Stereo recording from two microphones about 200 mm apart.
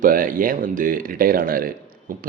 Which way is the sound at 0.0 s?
45° right (ahead or behind).